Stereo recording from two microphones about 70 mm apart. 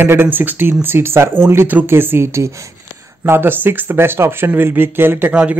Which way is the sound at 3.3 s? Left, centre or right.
Right.